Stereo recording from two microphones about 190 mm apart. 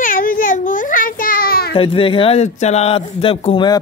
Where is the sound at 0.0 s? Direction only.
45° left (ahead or behind).